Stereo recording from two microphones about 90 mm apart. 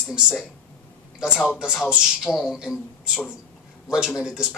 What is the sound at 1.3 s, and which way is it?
Speech, 15° left (ahead or behind).